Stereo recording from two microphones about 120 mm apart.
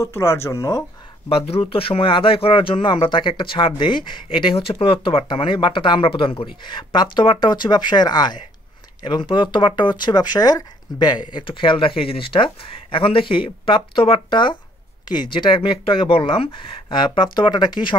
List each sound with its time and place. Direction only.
0.0 s speech: 20° left (ahead or behind)
1.3 s speech: 50° left (ahead or behind); by 11.1 s 35° left (ahead or behind)
11.3 s speech: 45° left (ahead or behind)